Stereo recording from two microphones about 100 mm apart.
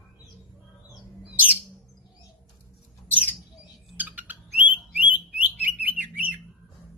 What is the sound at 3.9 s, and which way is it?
Bird, 15° right (ahead or behind).